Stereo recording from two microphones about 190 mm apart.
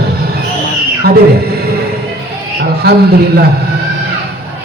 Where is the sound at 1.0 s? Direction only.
55° right (ahead or behind).